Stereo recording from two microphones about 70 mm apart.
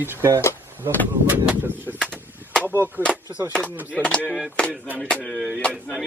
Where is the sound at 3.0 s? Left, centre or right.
Right.